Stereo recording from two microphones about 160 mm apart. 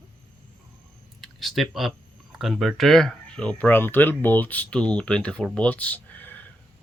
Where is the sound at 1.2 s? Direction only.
Centre (ahead or behind).